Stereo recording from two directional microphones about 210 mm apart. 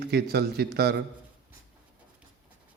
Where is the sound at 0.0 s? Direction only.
50° right (ahead or behind).